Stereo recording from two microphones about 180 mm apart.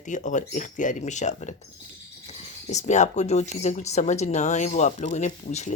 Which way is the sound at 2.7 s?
40° left (ahead or behind).